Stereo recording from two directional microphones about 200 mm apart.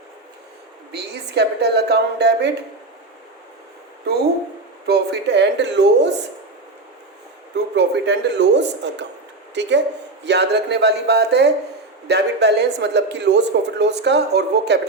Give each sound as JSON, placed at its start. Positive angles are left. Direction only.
{"t": 0.9, "sound": "a woman's voice", "side_deg": -55}
{"t": 4.9, "sound": "a woman's voice", "side_deg": -55}
{"t": 7.5, "sound": "a woman's voice", "side_deg": -60}